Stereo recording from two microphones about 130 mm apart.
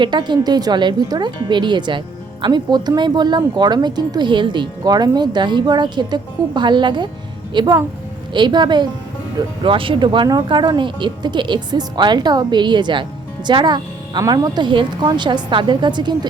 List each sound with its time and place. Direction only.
0.0 s speech: 35° right (ahead or behind)